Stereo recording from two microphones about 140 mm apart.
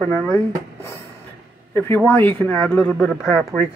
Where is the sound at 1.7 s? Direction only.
15° left (ahead or behind).